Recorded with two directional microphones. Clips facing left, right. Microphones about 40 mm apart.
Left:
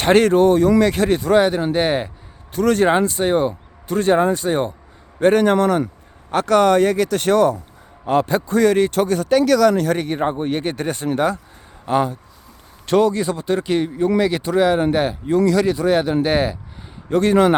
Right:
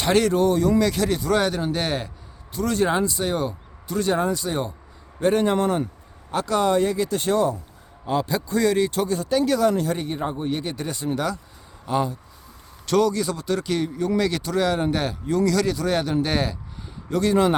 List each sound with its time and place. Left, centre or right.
0.0 s speech: left
1.4 s a man's voice: left
2.5 s speech: left
5.2 s speech: left
6.3 s speech: left
8.4 s speech: left
12.8 s a man's voice: left
17.1 s speech: left